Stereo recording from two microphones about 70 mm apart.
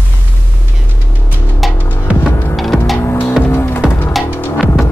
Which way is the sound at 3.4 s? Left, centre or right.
Left.